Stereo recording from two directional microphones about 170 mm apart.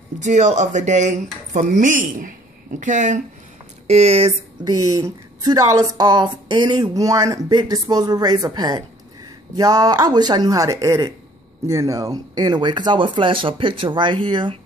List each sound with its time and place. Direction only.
0.2 s speech: 45° right (ahead or behind)
3.8 s speech: 35° right (ahead or behind)
4.6 s a woman's voice: 20° right (ahead or behind)